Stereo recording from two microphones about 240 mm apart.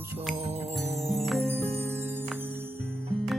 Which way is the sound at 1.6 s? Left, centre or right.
Centre.